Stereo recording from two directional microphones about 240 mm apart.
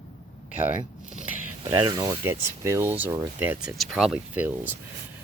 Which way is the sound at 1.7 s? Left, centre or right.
Centre.